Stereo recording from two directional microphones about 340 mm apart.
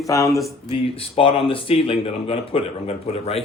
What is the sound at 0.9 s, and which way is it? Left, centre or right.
Speech, centre.